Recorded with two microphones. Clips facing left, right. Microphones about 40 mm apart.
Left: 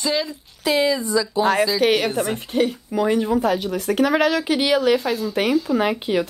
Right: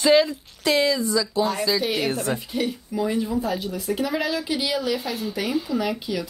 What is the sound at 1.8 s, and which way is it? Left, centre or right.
Speech, left.